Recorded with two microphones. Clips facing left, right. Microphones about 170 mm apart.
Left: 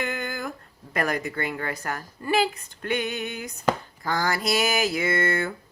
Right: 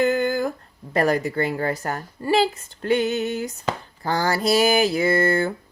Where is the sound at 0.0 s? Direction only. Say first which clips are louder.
Right 10 dB; 35° right (ahead or behind).